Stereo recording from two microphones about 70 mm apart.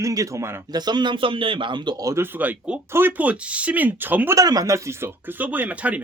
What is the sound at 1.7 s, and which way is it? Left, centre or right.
Speech, right.